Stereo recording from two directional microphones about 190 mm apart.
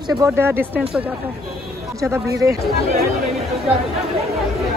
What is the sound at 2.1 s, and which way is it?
Speech, 15° right (ahead or behind).